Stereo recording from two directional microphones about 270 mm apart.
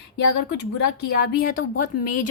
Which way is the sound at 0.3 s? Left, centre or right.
Left.